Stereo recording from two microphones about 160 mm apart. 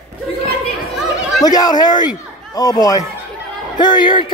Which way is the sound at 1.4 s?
25° left (ahead or behind).